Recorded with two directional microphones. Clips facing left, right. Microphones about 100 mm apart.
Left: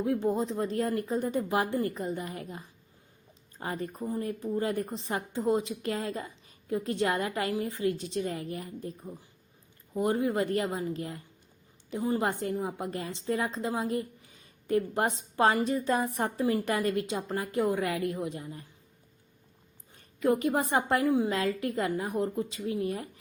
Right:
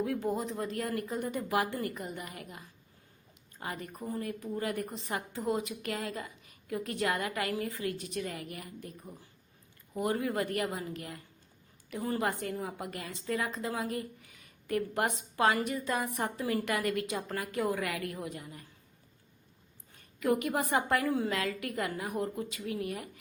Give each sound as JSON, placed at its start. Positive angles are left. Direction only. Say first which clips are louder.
{"t": 0.0, "sound": "a woman's voice", "louder": "left 4 dB", "side_deg": 25}
{"t": 20.1, "sound": "a woman's voice", "louder": "left 3 dB", "side_deg": 30}